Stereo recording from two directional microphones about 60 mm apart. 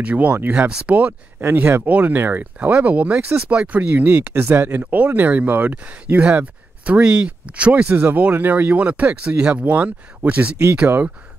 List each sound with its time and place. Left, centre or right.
0.0 s speech: right
1.4 s speech: right
4.4 s speech: right
4.9 s speech: right
7.9 s speech: right